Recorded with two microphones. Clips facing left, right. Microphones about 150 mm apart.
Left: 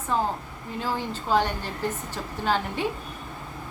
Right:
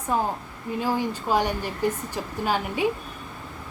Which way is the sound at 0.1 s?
10° right (ahead or behind).